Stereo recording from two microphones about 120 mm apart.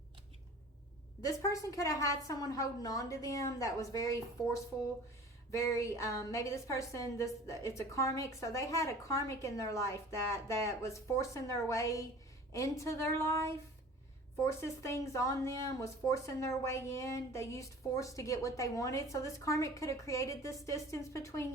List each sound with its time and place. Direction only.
1.2 s a woman's voice: 30° left (ahead or behind)
14.4 s a woman's voice: 25° left (ahead or behind)